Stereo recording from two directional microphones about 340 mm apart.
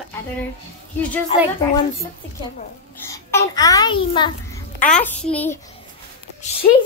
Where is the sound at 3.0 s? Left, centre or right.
Centre.